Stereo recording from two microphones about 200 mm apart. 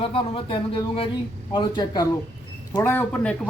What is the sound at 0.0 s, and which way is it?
Speech, 30° left (ahead or behind).